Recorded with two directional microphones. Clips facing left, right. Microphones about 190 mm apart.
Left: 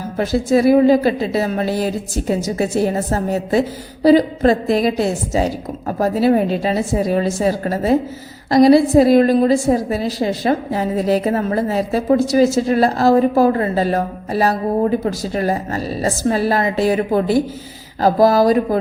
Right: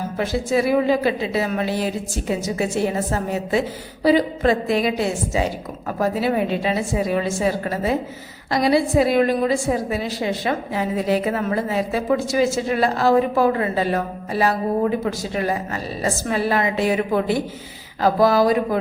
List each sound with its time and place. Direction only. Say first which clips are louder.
0.2 s a woman's voice: left 6 dB; 40° left (ahead or behind)